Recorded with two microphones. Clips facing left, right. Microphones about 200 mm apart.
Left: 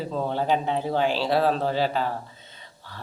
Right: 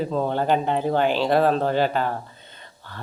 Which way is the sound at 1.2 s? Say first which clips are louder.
Right 3 dB; 50° right (ahead or behind).